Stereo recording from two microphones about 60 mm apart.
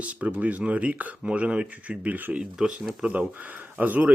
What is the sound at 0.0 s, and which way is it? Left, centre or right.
Speech, right.